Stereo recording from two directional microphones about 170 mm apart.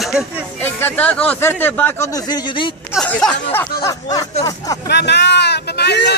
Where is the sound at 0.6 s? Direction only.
10° left (ahead or behind); by 2.7 s 30° left (ahead or behind).